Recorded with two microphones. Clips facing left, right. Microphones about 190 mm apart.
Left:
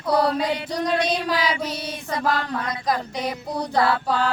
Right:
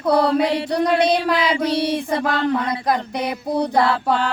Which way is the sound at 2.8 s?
60° right (ahead or behind).